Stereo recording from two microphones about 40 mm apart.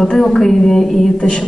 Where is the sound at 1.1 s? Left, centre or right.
Left.